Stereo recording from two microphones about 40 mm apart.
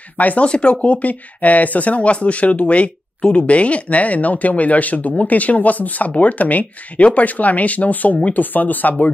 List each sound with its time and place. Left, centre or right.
0.2 s speech: left
0.5 s speech: left